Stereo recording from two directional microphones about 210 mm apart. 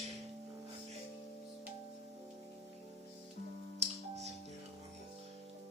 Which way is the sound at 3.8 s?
30° right (ahead or behind).